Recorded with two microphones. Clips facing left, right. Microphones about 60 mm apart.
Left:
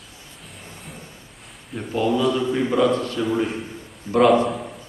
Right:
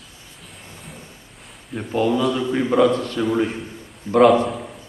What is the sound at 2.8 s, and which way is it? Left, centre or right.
Speech, left.